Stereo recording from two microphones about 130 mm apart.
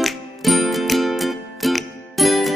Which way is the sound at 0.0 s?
Centre (ahead or behind).